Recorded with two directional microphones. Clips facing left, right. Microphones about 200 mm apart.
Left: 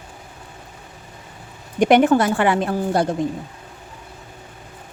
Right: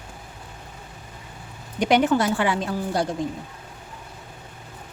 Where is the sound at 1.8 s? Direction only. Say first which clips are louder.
Left 5 dB; 50° left (ahead or behind).